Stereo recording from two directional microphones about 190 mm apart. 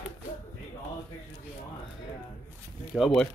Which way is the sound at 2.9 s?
Centre (ahead or behind).